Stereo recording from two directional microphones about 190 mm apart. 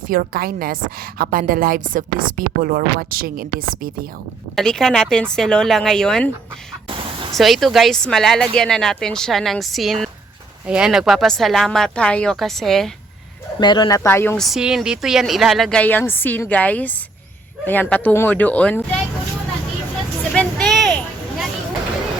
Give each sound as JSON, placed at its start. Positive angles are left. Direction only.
{"t": 0.1, "sound": "a woman's voice", "side_deg": -50}
{"t": 4.5, "sound": "speech", "side_deg": 5}
{"t": 7.3, "sound": "speech", "side_deg": 0}
{"t": 13.6, "sound": "speech", "side_deg": 25}
{"t": 14.4, "sound": "speech", "side_deg": 0}
{"t": 20.3, "sound": "a sound", "side_deg": 5}